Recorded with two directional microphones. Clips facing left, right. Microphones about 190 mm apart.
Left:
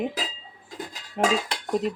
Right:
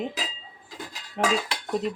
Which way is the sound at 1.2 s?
5° left (ahead or behind).